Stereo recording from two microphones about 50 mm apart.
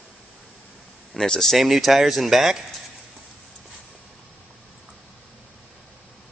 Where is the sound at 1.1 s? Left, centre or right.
Centre.